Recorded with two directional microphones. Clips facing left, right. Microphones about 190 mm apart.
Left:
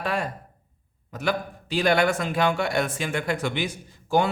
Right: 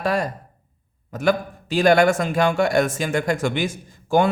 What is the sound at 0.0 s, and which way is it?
A man's voice, 40° right (ahead or behind).